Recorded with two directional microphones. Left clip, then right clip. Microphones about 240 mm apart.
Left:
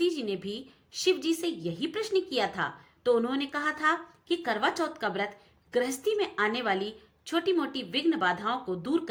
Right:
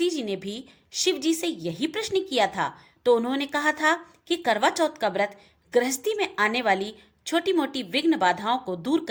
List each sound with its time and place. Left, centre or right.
0.0 s a woman's voice: right